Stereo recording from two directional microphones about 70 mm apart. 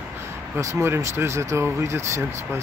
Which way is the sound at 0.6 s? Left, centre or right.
Right.